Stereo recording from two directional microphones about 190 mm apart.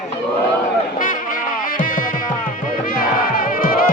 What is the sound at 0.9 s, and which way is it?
Music, 45° left (ahead or behind).